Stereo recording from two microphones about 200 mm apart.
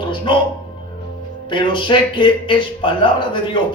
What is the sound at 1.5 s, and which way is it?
A man's voice, 25° left (ahead or behind).